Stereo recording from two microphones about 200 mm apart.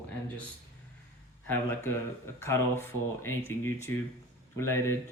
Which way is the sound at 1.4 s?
10° left (ahead or behind).